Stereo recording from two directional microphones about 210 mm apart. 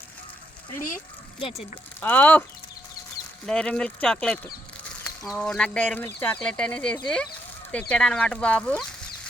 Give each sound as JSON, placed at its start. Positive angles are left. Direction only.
{"t": 0.8, "sound": "speech", "side_deg": 40}
{"t": 2.0, "sound": "speech", "side_deg": 10}
{"t": 3.4, "sound": "speech", "side_deg": 5}